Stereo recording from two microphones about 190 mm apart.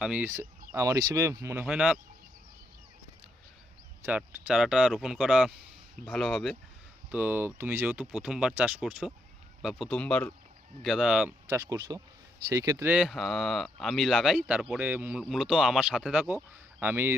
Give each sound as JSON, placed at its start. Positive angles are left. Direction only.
{"t": 0.0, "sound": "speech", "side_deg": -5}
{"t": 1.6, "sound": "speech", "side_deg": 0}
{"t": 4.0, "sound": "speech", "side_deg": -5}
{"t": 11.4, "sound": "speech", "side_deg": -15}
{"t": 12.9, "sound": "speech", "side_deg": 0}